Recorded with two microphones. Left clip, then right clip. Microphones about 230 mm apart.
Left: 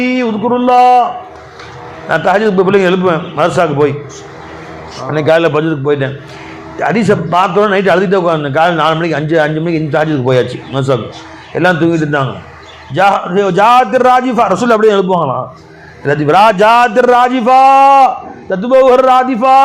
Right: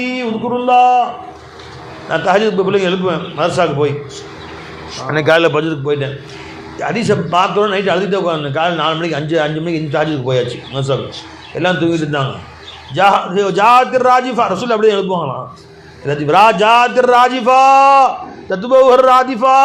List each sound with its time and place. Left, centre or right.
0.0 s a man's voice: left
2.0 s a man's voice: left
5.0 s a man's voice: left